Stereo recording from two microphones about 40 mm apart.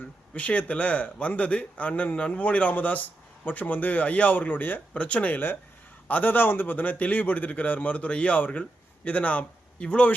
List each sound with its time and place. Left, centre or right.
0.3 s a man's voice: left
4.9 s a man's voice: left
5.3 s speech: left
6.1 s speech: left
8.4 s speech: left